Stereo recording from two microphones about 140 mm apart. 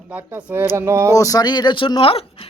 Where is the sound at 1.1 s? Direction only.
25° left (ahead or behind); by 2.2 s 40° left (ahead or behind).